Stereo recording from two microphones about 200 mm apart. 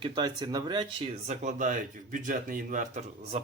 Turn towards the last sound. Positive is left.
turn(degrees=-35)  # may be behind; listen again after turning